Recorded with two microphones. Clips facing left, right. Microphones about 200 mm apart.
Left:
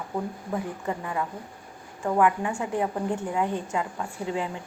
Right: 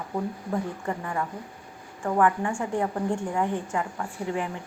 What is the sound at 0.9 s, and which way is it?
A woman's voice, 15° left (ahead or behind).